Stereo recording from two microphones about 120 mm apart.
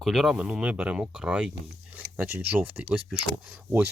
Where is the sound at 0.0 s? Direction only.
Centre (ahead or behind).